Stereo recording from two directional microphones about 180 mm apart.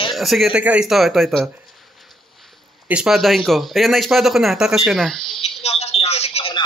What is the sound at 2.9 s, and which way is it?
Speech, 5° right (ahead or behind).